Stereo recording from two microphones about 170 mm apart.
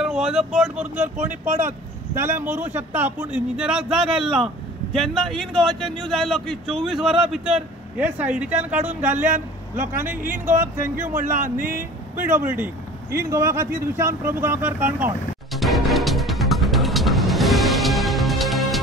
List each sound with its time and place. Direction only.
0.0 s a man's voice: 5° right (ahead or behind)
1.4 s speech: 50° right (ahead or behind)
2.1 s a man's voice: 15° right (ahead or behind)
11.0 s speech: 50° right (ahead or behind)
12.3 s a man's voice: 10° right (ahead or behind)
15.6 s music: centre (ahead or behind)